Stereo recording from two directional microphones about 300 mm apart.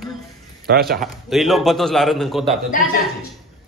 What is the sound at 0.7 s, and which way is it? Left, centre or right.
Speech, right.